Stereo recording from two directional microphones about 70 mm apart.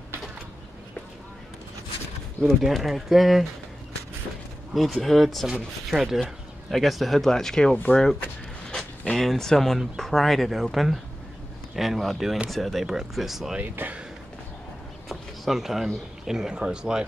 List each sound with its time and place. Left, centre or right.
2.4 s speech: centre
4.7 s speech: centre
7.7 s speech: left
9.1 s speech: centre
13.6 s speech: right
15.0 s a sound: centre
16.3 s speech: centre